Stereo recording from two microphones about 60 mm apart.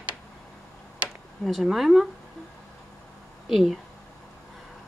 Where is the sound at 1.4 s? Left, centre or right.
Centre.